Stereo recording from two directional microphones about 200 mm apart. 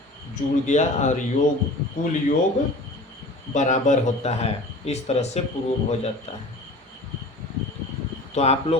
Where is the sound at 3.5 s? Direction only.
35° left (ahead or behind).